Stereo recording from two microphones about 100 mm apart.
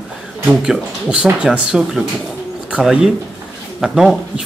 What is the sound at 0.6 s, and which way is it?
Speech, 5° right (ahead or behind).